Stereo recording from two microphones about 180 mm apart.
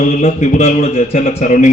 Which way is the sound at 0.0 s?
40° left (ahead or behind).